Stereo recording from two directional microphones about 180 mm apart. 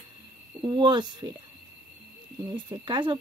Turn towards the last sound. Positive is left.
turn(degrees=-25)  # may be behind; listen again after turning